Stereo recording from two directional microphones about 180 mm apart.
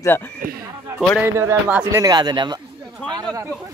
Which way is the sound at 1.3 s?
15° right (ahead or behind).